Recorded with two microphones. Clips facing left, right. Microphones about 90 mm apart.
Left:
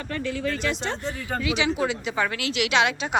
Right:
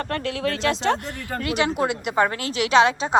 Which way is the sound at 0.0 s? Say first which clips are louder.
Right 3 dB; 75° right (ahead or behind).